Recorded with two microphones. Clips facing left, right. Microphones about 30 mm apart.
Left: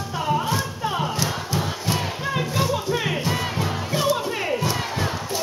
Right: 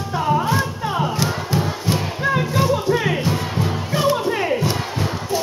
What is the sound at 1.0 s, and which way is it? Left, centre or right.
Crowd, right.